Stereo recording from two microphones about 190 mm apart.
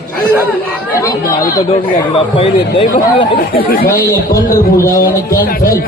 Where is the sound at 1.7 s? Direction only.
30° left (ahead or behind).